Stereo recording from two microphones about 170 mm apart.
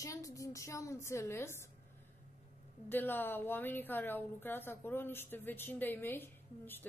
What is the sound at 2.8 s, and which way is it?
A woman's voice, 10° left (ahead or behind).